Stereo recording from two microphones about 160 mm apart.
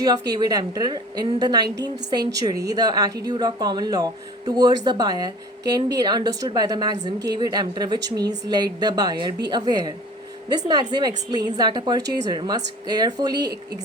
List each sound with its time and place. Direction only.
0.0 s speech: 25° right (ahead or behind)
10.9 s speech: 25° right (ahead or behind)